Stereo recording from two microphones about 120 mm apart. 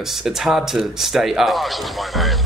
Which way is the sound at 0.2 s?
Centre (ahead or behind).